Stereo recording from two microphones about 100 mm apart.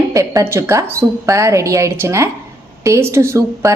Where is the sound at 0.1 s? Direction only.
30° right (ahead or behind).